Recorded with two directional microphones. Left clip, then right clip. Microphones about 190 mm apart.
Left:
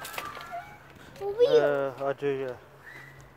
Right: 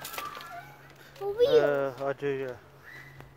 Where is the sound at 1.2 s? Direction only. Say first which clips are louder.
Left 1 dB; 55° right (ahead or behind).